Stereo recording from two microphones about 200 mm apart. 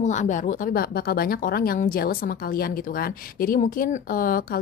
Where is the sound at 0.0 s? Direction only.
35° left (ahead or behind).